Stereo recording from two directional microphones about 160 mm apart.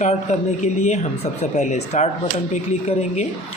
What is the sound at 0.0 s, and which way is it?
Speech, 45° left (ahead or behind).